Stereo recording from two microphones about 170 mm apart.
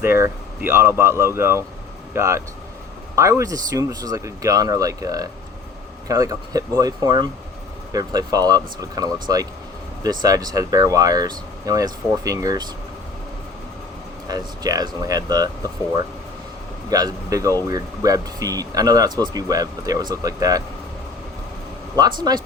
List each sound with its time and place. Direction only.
0.0 s speech: 15° right (ahead or behind)
14.3 s speech: 20° right (ahead or behind)
16.9 s speech: 20° right (ahead or behind)
22.0 s speech: 25° right (ahead or behind)